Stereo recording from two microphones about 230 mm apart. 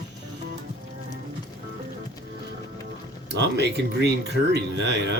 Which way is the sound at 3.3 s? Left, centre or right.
Right.